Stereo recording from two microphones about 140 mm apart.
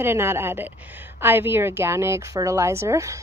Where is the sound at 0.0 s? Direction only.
15° right (ahead or behind).